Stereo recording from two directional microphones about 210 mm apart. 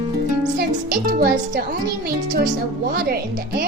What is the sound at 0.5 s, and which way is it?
Speech, 45° right (ahead or behind).